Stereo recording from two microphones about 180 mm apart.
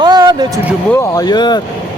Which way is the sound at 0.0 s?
20° right (ahead or behind).